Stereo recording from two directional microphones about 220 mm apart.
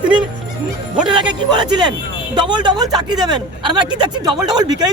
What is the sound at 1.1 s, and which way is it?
Speech, 20° right (ahead or behind).